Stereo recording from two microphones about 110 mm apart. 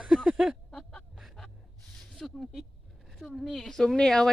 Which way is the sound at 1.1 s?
Centre (ahead or behind).